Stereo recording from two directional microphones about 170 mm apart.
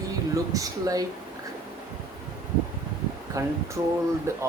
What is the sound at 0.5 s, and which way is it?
Speech, 20° right (ahead or behind).